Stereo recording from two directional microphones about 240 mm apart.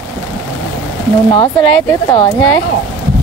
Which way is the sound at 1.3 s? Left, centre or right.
Centre.